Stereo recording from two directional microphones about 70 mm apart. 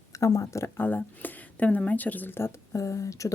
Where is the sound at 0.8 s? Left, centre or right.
Left.